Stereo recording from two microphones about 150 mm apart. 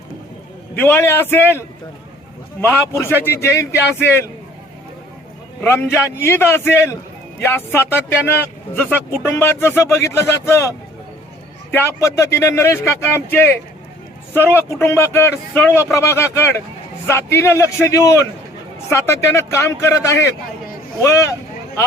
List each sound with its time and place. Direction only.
0.8 s a man's voice: 15° left (ahead or behind)
5.6 s a man's voice: 15° left (ahead or behind)